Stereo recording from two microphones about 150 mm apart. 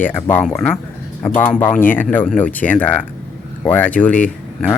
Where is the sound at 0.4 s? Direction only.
Centre (ahead or behind).